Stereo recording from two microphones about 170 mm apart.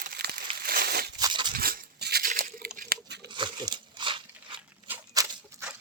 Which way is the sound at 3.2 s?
25° right (ahead or behind).